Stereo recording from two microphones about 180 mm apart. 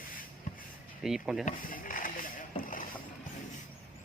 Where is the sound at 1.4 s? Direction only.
50° left (ahead or behind).